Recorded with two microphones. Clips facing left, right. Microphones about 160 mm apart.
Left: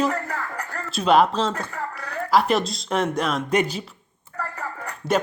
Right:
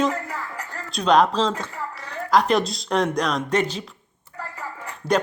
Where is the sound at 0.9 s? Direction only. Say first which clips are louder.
Even; 5° left (ahead or behind).